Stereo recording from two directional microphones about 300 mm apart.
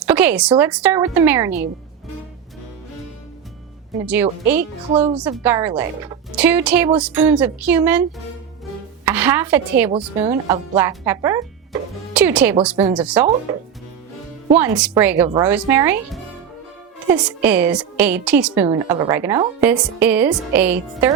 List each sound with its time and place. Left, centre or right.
0.0 s a sound: centre
0.6 s a woman's voice: centre
4.0 s speech: centre
9.0 s a woman's voice: centre
9.9 s a woman's voice: right
10.5 s music: centre
12.6 s speech: centre
14.5 s a woman's voice: centre